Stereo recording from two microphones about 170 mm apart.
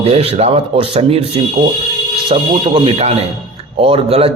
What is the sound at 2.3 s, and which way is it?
Speech, 35° right (ahead or behind).